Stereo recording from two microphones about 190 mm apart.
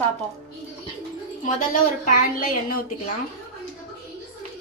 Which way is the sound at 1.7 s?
45° left (ahead or behind).